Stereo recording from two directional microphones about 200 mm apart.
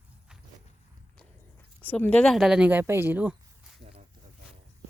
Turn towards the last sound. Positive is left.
turn(degrees=-5)  # may be behind; listen again after turning